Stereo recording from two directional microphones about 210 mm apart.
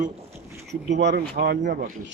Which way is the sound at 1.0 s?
55° right (ahead or behind).